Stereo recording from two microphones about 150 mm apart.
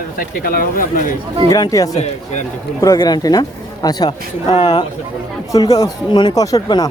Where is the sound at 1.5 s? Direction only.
25° left (ahead or behind).